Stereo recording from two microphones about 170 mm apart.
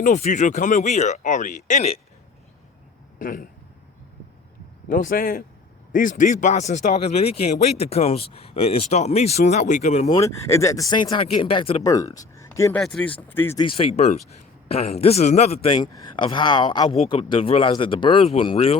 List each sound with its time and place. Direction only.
0.0 s speech: 45° left (ahead or behind)
3.2 s speech: 55° left (ahead or behind)
4.9 s speech: 55° left (ahead or behind)
10.1 s speech: 15° left (ahead or behind)
11.9 s speech: 20° left (ahead or behind)
13.6 s speech: 30° left (ahead or behind)
15.8 s speech: 25° left (ahead or behind)
16.9 s speech: 35° left (ahead or behind)